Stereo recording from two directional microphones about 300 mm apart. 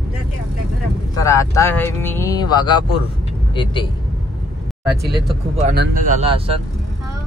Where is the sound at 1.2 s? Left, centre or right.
Centre.